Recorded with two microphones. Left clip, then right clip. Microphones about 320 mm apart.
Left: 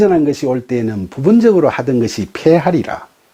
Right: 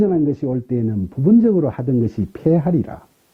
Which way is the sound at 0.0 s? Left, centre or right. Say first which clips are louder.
Left 6 dB; centre.